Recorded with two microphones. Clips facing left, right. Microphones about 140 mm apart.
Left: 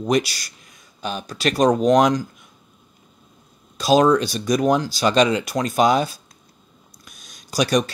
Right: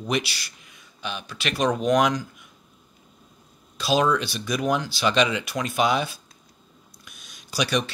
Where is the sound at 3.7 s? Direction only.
40° left (ahead or behind).